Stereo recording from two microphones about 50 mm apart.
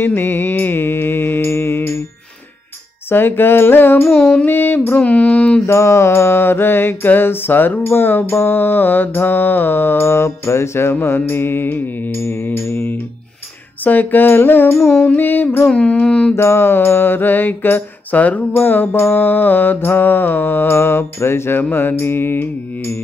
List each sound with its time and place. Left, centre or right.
0.0 s mantra: left
3.1 s mantra: left
5.7 s mantra: left
13.8 s mantra: left
15.0 s mantra: left
15.6 s music: centre
16.3 s mantra: left